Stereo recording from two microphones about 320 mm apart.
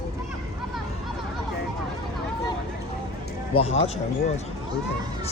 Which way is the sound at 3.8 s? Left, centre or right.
Centre.